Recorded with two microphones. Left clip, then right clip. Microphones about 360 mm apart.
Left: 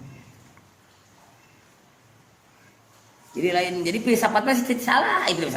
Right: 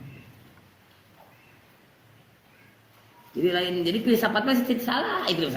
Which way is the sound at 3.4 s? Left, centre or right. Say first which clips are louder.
Left 2 dB; left.